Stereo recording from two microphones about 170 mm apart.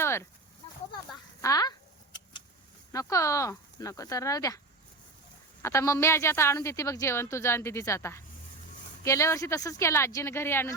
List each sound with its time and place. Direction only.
0.0 s a sound: 15° left (ahead or behind)
1.4 s speech: 20° left (ahead or behind)
2.9 s speech: 20° left (ahead or behind)
5.6 s a woman's voice: 15° left (ahead or behind)